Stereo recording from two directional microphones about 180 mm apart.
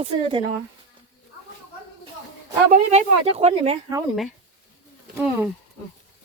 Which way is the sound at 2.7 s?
35° right (ahead or behind).